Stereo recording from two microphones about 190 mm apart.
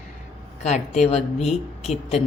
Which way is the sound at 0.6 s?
35° left (ahead or behind).